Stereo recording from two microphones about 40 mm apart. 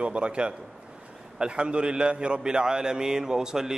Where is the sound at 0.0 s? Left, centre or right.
Right.